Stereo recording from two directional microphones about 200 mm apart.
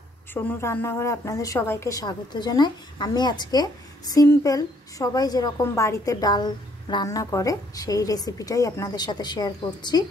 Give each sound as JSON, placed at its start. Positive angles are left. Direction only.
{"t": 0.3, "sound": "a woman's voice", "side_deg": 10}